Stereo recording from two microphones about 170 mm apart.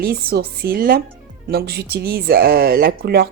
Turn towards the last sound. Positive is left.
turn(degrees=-65)  # may be behind; listen again after turning